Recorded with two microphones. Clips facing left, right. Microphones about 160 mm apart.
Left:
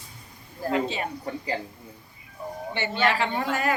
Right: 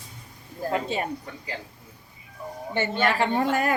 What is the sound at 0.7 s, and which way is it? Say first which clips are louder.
Speech: left 1 dB; 45° right (ahead or behind).